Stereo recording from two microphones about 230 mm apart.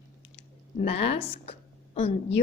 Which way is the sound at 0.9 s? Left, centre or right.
Left.